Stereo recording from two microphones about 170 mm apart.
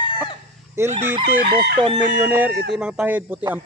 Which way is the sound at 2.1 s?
10° right (ahead or behind).